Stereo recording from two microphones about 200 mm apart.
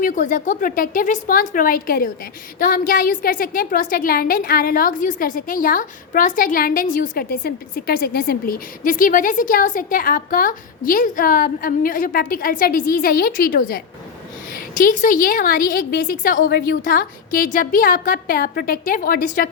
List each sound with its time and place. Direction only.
0.0 s a woman's voice: 40° left (ahead or behind)